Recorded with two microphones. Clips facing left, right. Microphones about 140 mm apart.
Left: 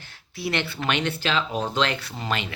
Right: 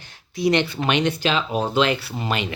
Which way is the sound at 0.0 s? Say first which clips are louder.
Right 9 dB; 15° right (ahead or behind).